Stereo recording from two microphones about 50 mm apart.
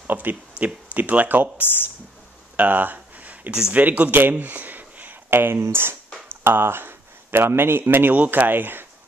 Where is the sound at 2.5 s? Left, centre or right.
Right.